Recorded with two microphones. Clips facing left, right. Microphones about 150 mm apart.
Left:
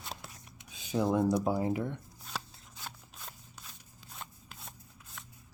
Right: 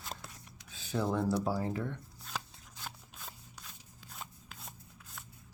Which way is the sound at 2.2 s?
5° left (ahead or behind).